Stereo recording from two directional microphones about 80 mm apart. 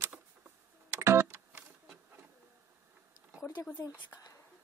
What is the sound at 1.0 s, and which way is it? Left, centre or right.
Music, right.